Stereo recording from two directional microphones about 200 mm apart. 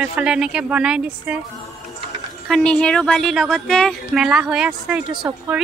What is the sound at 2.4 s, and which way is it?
Speech, 5° left (ahead or behind).